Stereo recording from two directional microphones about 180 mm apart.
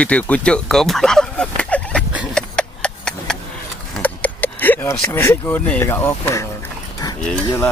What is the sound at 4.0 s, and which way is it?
Speech, 10° left (ahead or behind).